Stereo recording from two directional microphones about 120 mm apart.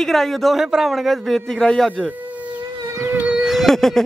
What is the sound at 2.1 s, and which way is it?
Siren, 10° right (ahead or behind).